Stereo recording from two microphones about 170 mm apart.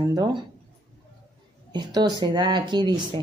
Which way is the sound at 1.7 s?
25° right (ahead or behind).